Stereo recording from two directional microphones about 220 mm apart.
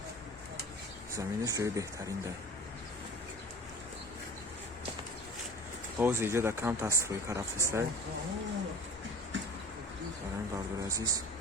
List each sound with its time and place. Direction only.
1.1 s speech: 15° right (ahead or behind)
6.0 s speech: 10° right (ahead or behind)
10.8 s speech: 15° right (ahead or behind)